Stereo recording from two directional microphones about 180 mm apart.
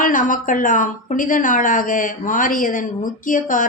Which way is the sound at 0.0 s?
45° left (ahead or behind).